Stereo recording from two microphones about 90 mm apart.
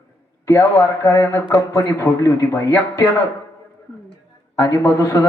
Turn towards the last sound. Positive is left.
turn(degrees=40)  # may be behind; listen again after turning